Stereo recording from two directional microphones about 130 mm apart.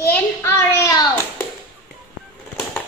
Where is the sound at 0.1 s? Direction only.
20° left (ahead or behind).